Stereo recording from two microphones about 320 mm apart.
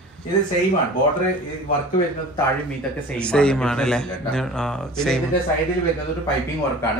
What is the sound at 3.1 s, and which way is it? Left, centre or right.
A man's voice, centre.